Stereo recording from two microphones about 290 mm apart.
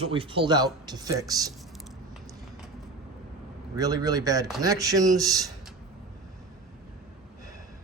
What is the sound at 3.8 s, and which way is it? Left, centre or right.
A man's voice, centre.